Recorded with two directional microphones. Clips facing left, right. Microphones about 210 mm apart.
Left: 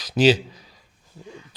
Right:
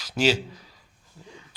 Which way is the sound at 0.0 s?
20° left (ahead or behind).